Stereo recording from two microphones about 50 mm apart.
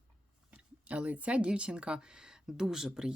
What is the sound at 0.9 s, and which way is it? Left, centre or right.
A woman's voice, right.